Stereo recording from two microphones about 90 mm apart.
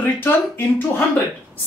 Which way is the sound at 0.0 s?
20° left (ahead or behind).